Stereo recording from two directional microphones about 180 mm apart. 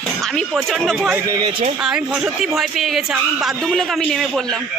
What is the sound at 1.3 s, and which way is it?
Speech, 25° right (ahead or behind).